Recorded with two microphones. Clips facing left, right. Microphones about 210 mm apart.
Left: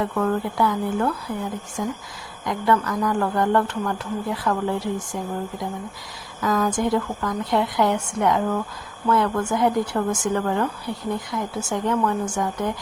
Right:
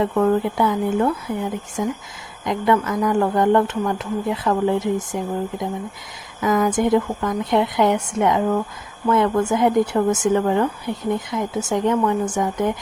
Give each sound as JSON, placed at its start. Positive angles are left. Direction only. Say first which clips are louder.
{"t": 0.0, "sound": "speech", "louder": "right 5 dB", "side_deg": -20}